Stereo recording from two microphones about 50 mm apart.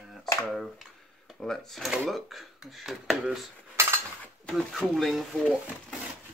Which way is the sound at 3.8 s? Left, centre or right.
Right.